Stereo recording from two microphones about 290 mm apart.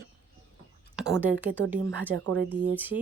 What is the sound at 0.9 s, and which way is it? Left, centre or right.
Speech, centre.